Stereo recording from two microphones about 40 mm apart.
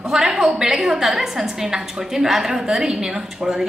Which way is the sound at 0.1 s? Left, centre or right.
Centre.